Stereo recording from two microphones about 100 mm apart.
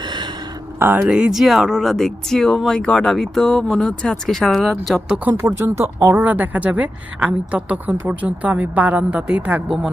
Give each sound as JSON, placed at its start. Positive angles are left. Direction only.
{"t": 0.8, "sound": "a woman's voice", "side_deg": -15}
{"t": 5.3, "sound": "speech", "side_deg": -25}
{"t": 6.2, "sound": "a woman's voice", "side_deg": -15}